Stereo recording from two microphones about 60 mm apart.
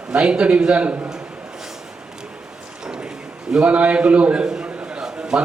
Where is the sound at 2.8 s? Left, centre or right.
Centre.